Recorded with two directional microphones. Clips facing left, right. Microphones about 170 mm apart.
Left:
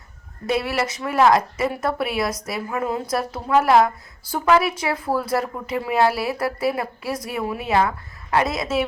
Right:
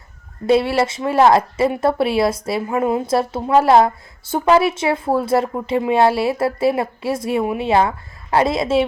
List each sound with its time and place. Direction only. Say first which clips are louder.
0.4 s a woman's voice: right 7 dB; 30° right (ahead or behind)